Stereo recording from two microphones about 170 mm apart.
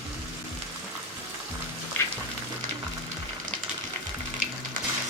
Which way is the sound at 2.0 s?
10° left (ahead or behind).